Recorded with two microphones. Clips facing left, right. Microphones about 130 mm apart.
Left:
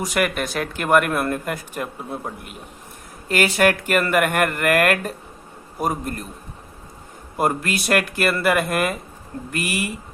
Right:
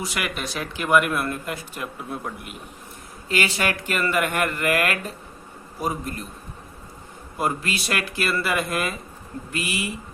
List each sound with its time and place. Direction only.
0.0 s speech: 50° left (ahead or behind)
2.0 s a man's voice: 35° left (ahead or behind)
3.2 s speech: 50° left (ahead or behind)
7.3 s speech: 50° left (ahead or behind)